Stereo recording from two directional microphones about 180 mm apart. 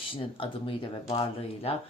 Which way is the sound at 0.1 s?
30° left (ahead or behind).